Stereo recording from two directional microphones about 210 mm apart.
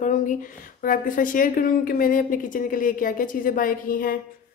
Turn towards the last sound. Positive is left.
turn(degrees=40)  # may be behind; listen again after turning